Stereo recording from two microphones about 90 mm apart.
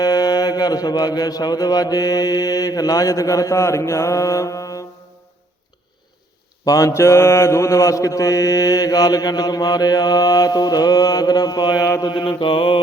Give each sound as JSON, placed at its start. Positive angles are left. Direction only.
{"t": 0.0, "sound": "mantra", "side_deg": 45}
{"t": 6.7, "sound": "mantra", "side_deg": 40}
{"t": 11.9, "sound": "mantra", "side_deg": 35}
{"t": 12.1, "sound": "mantra", "side_deg": 70}